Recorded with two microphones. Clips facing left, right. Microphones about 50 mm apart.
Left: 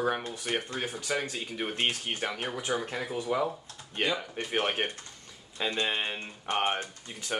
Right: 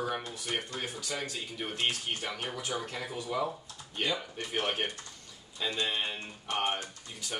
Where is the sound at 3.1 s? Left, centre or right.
Left.